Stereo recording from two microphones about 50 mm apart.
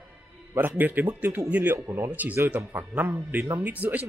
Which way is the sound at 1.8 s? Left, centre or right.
Right.